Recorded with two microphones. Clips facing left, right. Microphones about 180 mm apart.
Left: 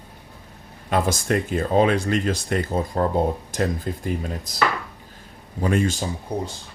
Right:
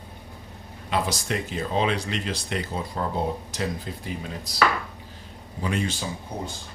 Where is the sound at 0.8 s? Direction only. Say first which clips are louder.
Left 5 dB; 50° left (ahead or behind).